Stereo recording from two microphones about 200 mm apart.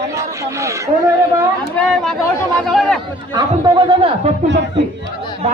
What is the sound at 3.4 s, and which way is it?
Speech, 20° right (ahead or behind).